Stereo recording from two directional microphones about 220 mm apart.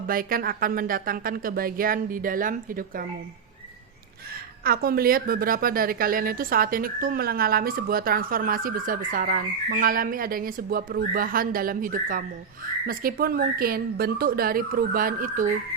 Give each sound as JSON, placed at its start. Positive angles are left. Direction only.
{"t": 0.1, "sound": "a woman's voice", "side_deg": -40}
{"t": 4.6, "sound": "a woman's voice", "side_deg": -45}